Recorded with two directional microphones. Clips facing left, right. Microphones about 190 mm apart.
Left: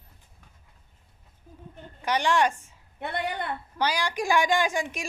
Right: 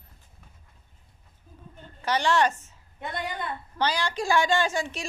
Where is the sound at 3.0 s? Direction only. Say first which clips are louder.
Left 2 dB; 65° left (ahead or behind).